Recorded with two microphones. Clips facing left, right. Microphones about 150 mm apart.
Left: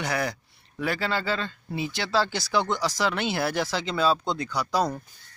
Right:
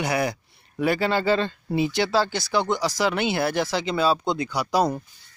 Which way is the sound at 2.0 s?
5° right (ahead or behind).